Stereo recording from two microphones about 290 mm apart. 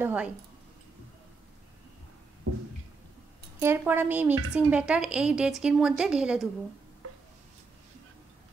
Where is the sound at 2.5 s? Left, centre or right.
Right.